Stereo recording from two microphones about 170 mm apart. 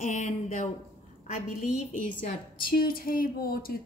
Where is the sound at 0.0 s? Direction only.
45° left (ahead or behind).